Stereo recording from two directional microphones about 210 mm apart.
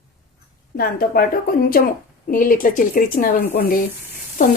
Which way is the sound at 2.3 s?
40° left (ahead or behind).